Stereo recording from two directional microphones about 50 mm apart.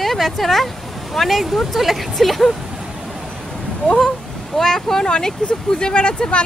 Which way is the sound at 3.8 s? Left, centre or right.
Centre.